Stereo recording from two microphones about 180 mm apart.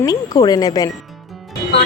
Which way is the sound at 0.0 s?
20° left (ahead or behind).